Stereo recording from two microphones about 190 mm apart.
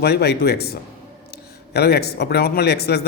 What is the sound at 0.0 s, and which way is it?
A man's voice, 60° left (ahead or behind).